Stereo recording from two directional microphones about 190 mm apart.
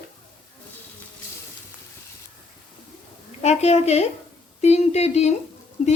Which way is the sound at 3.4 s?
35° left (ahead or behind).